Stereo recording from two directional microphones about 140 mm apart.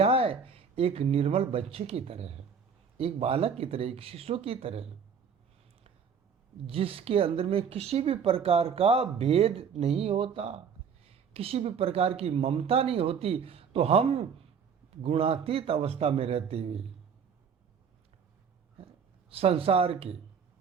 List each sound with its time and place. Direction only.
0.0 s speech: 45° right (ahead or behind)
6.7 s speech: 40° right (ahead or behind)
19.3 s speech: 45° right (ahead or behind)